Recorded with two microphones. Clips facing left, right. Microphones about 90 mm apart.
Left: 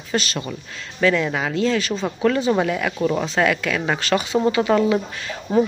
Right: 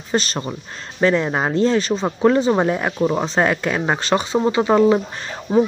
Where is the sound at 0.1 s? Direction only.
35° right (ahead or behind).